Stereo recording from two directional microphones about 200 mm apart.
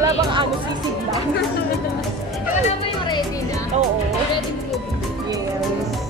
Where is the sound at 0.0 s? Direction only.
25° right (ahead or behind).